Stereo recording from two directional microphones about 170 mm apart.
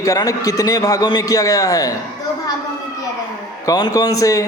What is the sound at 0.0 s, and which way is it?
A man's voice, 20° left (ahead or behind).